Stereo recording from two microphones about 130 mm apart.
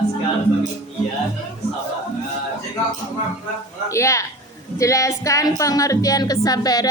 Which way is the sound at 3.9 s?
25° left (ahead or behind).